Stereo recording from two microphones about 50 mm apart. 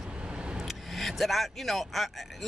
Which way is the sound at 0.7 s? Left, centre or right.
Centre.